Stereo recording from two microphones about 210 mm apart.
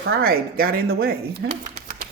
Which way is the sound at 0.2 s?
45° right (ahead or behind).